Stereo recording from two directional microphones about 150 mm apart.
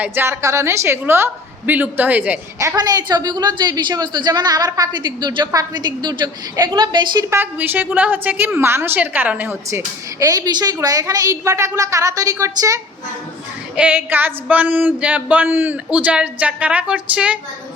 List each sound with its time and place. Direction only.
0.0 s a woman's voice: 15° right (ahead or behind)
2.6 s a woman's voice: 25° right (ahead or behind)
7.3 s a woman's voice: 15° right (ahead or behind)
13.7 s a woman's voice: 10° right (ahead or behind)